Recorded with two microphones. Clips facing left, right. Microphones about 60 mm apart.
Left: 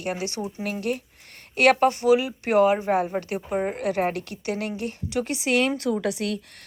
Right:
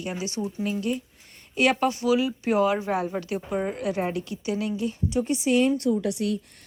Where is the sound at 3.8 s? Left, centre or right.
Left.